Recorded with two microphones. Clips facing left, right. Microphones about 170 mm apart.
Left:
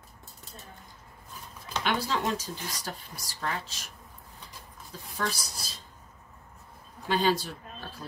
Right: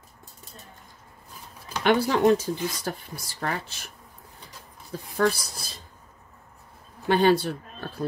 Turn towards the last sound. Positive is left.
turn(degrees=-55)  # may be behind; listen again after turning